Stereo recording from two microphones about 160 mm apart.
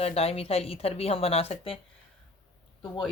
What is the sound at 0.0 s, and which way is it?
Speech, 40° left (ahead or behind).